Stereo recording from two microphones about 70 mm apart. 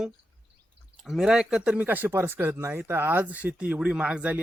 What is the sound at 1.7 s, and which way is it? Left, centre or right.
Speech, right.